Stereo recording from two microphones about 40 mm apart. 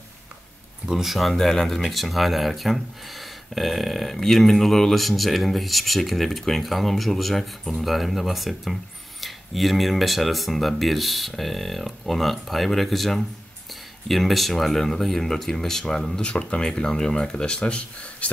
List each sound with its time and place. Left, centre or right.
0.8 s speech: centre
1.3 s speech: centre
16.2 s speech: left